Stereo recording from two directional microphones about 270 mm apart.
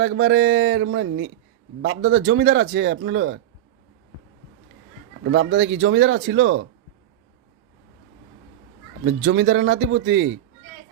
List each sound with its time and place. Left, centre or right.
0.0 s speech: right
5.2 s speech: right
9.0 s a man's voice: right